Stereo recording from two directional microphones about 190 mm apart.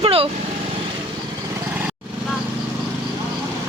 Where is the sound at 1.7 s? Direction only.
10° right (ahead or behind).